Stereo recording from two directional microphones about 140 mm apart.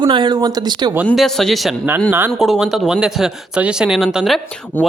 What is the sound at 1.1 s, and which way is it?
Speech, centre (ahead or behind).